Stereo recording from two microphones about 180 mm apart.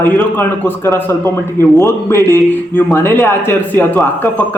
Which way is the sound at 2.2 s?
20° right (ahead or behind).